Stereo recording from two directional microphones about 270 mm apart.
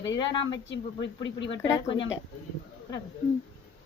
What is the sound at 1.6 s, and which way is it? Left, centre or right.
Speech, centre.